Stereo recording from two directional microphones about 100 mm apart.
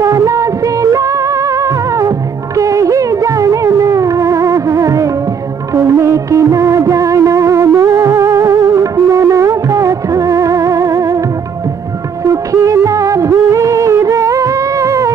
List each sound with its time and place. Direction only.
0.0 s music: 30° right (ahead or behind)
12.3 s music: 30° right (ahead or behind)